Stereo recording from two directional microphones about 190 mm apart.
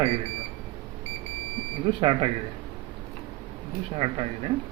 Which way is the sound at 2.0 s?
25° right (ahead or behind).